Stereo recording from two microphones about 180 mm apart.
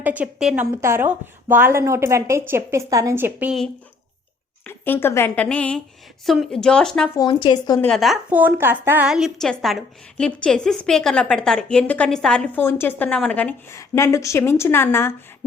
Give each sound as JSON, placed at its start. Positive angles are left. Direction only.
{"t": 0.0, "sound": "a woman's voice", "side_deg": -10}
{"t": 4.6, "sound": "a woman's voice", "side_deg": 10}
{"t": 7.2, "sound": "speech", "side_deg": 25}
{"t": 7.8, "sound": "a woman's voice", "side_deg": 5}